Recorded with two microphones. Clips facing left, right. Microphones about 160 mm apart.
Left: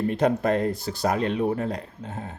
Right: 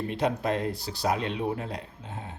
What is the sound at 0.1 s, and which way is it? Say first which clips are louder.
Speech: left 4 dB; 45° left (ahead or behind).